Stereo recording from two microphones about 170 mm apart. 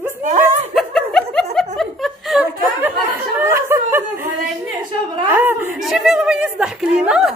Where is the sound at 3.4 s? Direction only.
15° right (ahead or behind).